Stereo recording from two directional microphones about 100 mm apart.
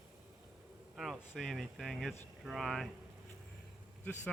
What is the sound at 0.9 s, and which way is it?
Speech, centre (ahead or behind).